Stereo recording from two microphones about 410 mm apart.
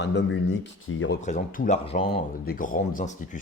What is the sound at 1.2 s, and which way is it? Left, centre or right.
A man's voice, centre.